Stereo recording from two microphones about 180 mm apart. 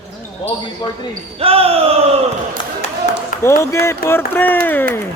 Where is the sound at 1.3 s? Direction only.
30° right (ahead or behind).